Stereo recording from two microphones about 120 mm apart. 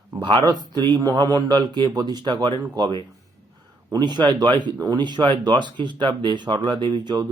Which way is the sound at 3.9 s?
35° right (ahead or behind).